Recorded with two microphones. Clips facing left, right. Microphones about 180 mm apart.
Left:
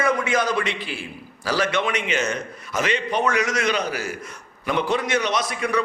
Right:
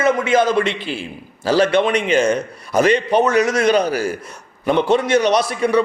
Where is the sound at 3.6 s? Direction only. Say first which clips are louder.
Right 8 dB; 45° right (ahead or behind).